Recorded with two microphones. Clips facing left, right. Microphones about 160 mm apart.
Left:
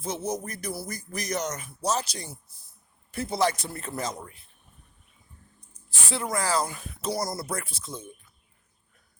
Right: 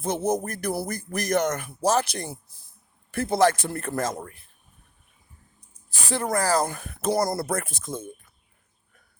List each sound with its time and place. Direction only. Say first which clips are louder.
0.0 s speech: right 6 dB; 55° right (ahead or behind)
6.1 s speech: right 4 dB; 50° right (ahead or behind)